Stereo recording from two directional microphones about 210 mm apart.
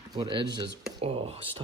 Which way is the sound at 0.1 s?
20° right (ahead or behind).